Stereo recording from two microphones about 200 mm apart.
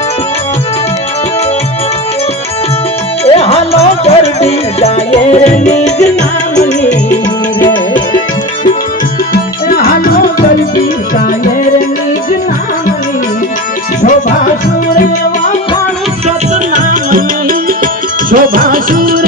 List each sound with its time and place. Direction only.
3.3 s music: 30° left (ahead or behind)
9.3 s tabla: 50° left (ahead or behind)
16.7 s music: 45° right (ahead or behind)